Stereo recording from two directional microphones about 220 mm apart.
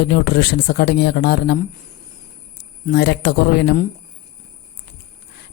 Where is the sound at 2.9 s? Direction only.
50° left (ahead or behind).